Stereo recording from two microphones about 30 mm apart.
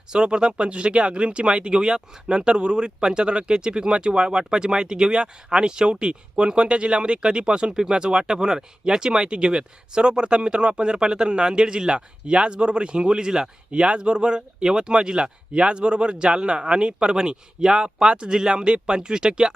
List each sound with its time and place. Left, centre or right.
0.1 s speech: right